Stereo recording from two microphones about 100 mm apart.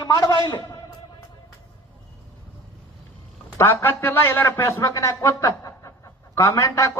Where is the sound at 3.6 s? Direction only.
25° left (ahead or behind).